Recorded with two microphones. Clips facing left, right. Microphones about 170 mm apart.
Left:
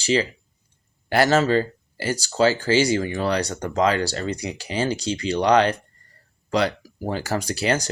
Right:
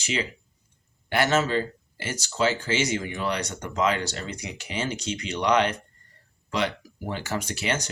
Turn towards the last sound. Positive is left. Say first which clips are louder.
# left 6 dB
turn(degrees=35)  # may be behind; listen again after turning